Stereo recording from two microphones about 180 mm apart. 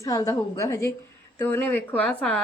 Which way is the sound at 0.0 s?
20° left (ahead or behind).